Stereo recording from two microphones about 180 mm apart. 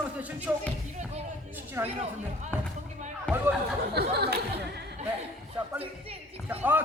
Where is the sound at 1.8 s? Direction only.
15° right (ahead or behind).